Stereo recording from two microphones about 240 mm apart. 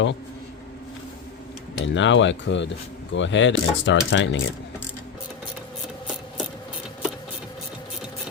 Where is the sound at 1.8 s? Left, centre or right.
Left.